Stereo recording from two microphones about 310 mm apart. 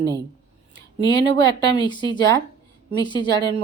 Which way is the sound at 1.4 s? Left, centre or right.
Centre.